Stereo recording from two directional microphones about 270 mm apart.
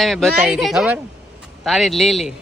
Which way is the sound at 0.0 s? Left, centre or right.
Centre.